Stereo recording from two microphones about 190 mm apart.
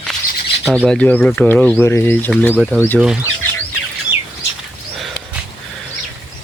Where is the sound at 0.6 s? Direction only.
Centre (ahead or behind).